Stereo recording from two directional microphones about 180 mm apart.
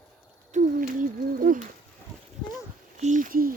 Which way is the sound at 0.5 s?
50° right (ahead or behind).